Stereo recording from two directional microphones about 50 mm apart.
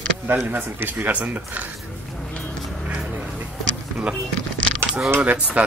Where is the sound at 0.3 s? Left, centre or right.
Right.